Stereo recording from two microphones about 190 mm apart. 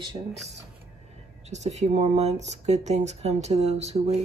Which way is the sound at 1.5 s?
35° right (ahead or behind).